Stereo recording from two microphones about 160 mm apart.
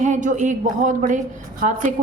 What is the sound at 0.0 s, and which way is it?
A woman's voice, 50° right (ahead or behind).